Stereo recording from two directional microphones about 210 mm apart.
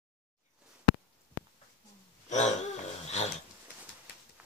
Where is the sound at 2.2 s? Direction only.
35° left (ahead or behind).